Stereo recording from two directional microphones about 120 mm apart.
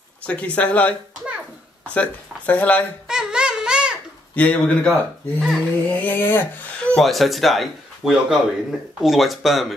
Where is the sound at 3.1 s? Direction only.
5° right (ahead or behind).